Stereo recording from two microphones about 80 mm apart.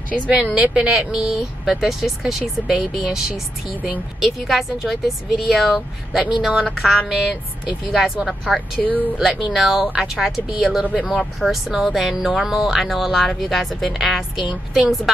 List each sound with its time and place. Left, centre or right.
0.3 s speech: centre
8.8 s speech: centre
9.2 s speech: centre